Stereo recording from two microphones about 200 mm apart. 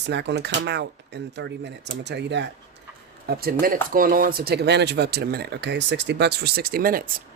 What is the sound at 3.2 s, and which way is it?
Speech, 50° right (ahead or behind).